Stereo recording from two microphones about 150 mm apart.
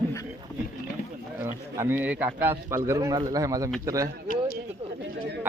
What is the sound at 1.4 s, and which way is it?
A man's voice, 15° right (ahead or behind).